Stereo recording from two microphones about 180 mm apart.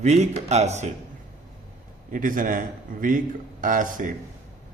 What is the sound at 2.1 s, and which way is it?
Speech, 50° right (ahead or behind).